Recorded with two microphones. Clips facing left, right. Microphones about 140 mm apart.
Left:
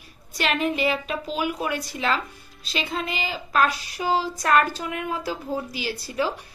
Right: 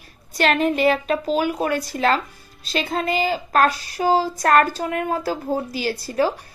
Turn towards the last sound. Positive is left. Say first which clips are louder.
# right 5 dB
turn(degrees=-45)  # may be behind; listen again after turning